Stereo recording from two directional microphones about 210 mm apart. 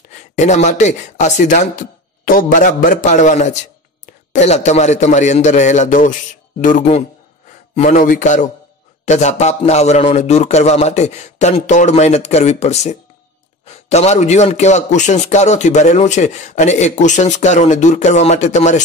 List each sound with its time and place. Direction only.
0.4 s speech: 35° left (ahead or behind)